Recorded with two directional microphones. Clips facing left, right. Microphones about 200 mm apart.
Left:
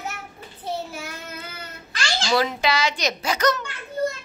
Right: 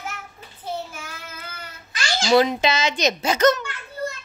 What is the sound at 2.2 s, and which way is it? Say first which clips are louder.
A child's voice: right 5 dB; 20° right (ahead or behind).